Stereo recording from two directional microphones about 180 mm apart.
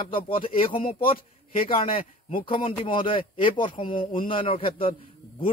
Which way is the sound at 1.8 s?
30° left (ahead or behind).